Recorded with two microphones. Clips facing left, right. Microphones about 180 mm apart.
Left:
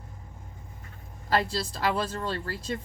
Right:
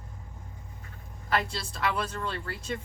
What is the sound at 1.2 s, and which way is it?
Speech, 30° left (ahead or behind).